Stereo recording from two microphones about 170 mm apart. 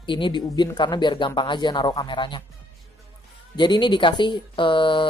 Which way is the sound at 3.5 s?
25° left (ahead or behind).